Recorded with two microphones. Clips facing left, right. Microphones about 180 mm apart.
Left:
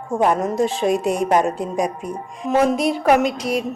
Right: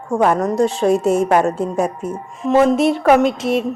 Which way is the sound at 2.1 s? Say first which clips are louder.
Right 4 dB; centre (ahead or behind).